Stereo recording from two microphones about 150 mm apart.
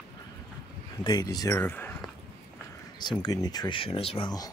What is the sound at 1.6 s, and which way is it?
Speech, 15° left (ahead or behind).